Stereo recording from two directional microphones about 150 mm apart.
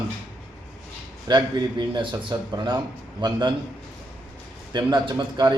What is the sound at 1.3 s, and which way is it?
Speech, 30° right (ahead or behind).